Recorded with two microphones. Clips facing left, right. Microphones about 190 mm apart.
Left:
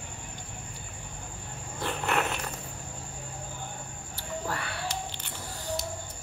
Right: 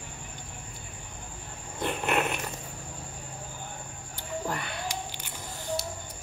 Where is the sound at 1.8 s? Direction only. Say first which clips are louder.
Right 2 dB; 20° right (ahead or behind).